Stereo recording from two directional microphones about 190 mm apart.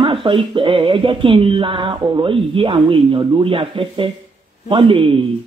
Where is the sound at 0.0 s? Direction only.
25° right (ahead or behind).